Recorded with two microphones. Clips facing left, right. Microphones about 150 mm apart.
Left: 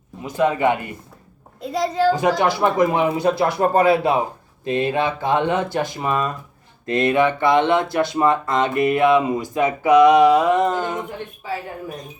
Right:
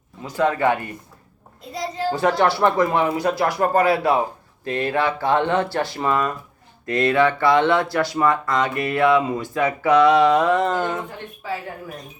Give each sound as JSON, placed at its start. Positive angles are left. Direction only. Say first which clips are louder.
{"t": 0.2, "sound": "speech", "louder": "left 1 dB", "side_deg": 20}
{"t": 1.7, "sound": "a child's voice", "louder": "left 7 dB", "side_deg": 90}
{"t": 2.1, "sound": "speech", "louder": "even", "side_deg": 15}